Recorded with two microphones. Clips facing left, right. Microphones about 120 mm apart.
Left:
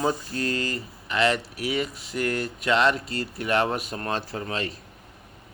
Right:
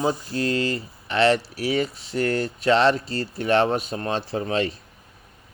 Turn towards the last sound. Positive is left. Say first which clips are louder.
# right 6 dB
turn(degrees=-25)  # may be behind; listen again after turning